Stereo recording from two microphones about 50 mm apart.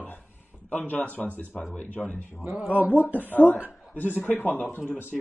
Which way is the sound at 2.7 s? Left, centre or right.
Right.